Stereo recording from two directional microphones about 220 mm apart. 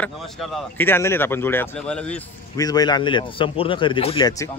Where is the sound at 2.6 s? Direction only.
15° left (ahead or behind).